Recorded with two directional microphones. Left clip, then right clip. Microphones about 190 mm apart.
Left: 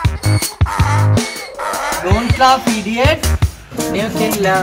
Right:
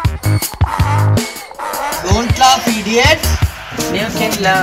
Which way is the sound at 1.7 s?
50° left (ahead or behind).